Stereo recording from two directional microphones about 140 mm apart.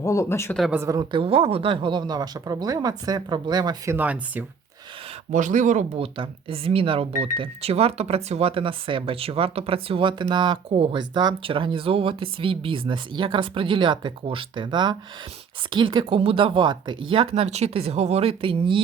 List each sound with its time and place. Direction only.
0.0 s speech: 20° left (ahead or behind)
0.7 s a woman's voice: 20° right (ahead or behind)
1.1 s speech: 40° right (ahead or behind)
3.9 s speech: 10° right (ahead or behind)
5.3 s speech: 65° right (ahead or behind)
6.0 s speech: 45° right (ahead or behind)